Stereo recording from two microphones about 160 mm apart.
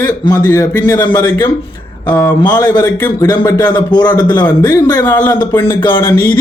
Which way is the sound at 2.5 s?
25° left (ahead or behind).